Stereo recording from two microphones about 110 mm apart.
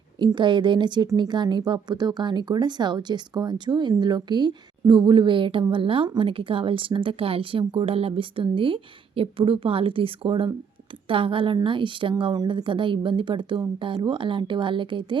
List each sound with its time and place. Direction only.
0.3 s speech: 45° right (ahead or behind)